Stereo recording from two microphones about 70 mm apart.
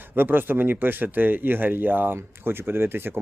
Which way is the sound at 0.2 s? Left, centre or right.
Right.